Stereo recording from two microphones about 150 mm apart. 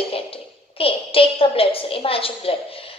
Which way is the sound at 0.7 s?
40° left (ahead or behind).